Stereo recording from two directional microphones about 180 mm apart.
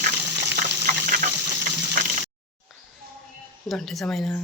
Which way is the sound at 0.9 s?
45° right (ahead or behind).